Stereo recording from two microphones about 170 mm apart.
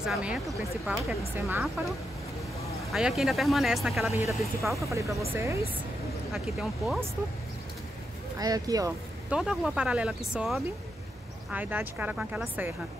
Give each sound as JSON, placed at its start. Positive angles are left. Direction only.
{"t": 0.0, "sound": "speech", "side_deg": -5}
{"t": 2.9, "sound": "speech", "side_deg": 0}
{"t": 4.8, "sound": "speech", "side_deg": -15}
{"t": 6.3, "sound": "speech", "side_deg": 0}
{"t": 8.4, "sound": "speech", "side_deg": -20}
{"t": 9.3, "sound": "speech", "side_deg": -5}